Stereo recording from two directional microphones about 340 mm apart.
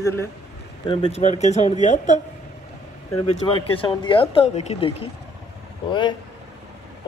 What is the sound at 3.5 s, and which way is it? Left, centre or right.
Speech, centre.